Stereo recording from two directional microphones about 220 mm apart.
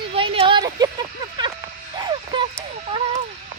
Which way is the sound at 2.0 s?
20° right (ahead or behind).